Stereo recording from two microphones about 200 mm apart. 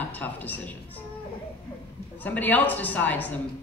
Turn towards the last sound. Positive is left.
turn(degrees=10)  # may be behind; listen again after turning